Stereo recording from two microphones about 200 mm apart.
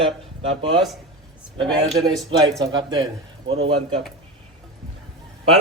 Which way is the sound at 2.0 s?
20° right (ahead or behind).